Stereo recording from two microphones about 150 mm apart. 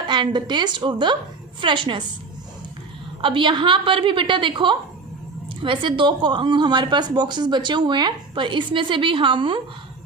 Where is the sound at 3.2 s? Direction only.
35° right (ahead or behind).